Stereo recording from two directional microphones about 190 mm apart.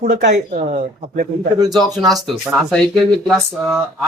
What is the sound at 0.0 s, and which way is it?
Speech, 40° right (ahead or behind).